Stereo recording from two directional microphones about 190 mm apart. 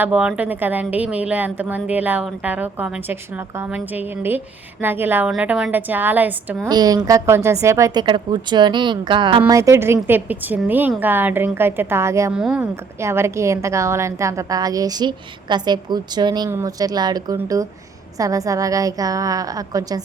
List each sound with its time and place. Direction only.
0.0 s a woman's voice: 5° right (ahead or behind)
6.7 s a woman's voice: 20° right (ahead or behind)
12.3 s speech: 5° right (ahead or behind)
13.0 s a woman's voice: 15° right (ahead or behind)